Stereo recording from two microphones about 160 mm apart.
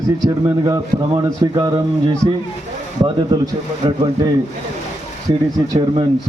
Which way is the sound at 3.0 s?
25° right (ahead or behind).